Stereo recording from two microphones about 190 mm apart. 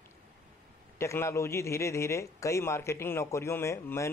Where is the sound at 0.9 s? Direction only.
15° left (ahead or behind).